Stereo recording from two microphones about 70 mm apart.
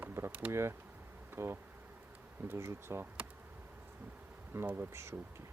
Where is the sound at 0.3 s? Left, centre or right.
Right.